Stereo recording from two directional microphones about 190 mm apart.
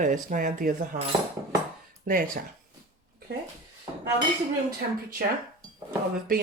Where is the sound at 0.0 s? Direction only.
45° right (ahead or behind).